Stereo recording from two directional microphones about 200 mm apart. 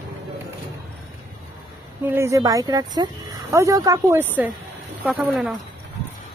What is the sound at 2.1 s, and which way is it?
Speech, 15° right (ahead or behind).